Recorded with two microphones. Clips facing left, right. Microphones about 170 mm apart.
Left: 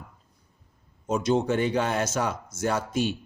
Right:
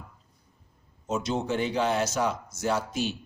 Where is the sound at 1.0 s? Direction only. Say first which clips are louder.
Left 5 dB; 50° left (ahead or behind).